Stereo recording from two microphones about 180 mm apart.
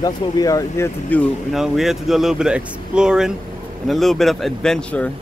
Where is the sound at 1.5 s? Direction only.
Centre (ahead or behind).